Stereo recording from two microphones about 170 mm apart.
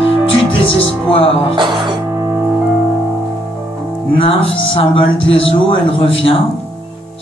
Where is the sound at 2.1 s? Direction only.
15° right (ahead or behind).